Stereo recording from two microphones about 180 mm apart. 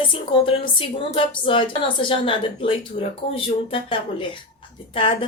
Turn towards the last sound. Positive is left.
turn(degrees=30)  # may be behind; listen again after turning